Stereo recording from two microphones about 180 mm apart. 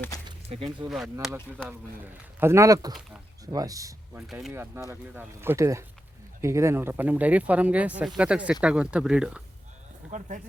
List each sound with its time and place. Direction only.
0.3 s a sound: 30° right (ahead or behind)
0.9 s speech: centre (ahead or behind)
2.4 s speech: 15° right (ahead or behind)
4.3 s speech: centre (ahead or behind)
4.5 s speech: 10° right (ahead or behind)
10.1 s speech: 40° right (ahead or behind)